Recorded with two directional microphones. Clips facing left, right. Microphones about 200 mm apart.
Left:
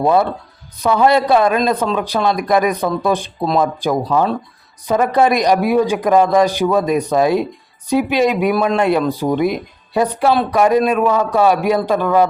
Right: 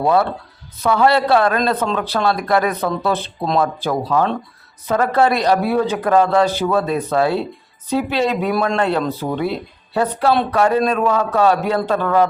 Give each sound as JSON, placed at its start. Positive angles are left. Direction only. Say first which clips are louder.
{"t": 0.0, "sound": "a man's voice", "louder": "left 2 dB", "side_deg": 20}